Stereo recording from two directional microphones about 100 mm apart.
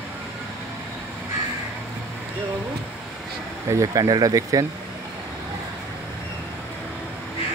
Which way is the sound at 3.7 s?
35° right (ahead or behind).